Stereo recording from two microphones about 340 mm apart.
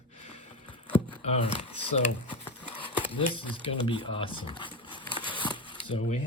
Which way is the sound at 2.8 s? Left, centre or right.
Centre.